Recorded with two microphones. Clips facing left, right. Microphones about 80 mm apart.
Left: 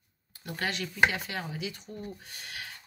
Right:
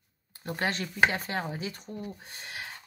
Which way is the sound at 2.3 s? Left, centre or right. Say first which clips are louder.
Right 2 dB; right.